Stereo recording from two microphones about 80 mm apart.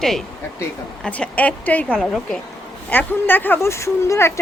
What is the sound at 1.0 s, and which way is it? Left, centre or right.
Speech, centre.